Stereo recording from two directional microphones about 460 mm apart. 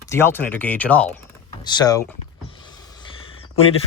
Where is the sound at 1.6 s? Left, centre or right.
Centre.